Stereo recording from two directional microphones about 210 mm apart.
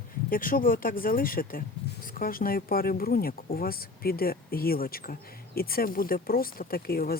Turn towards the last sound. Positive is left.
turn(degrees=45)  # may be behind; listen again after turning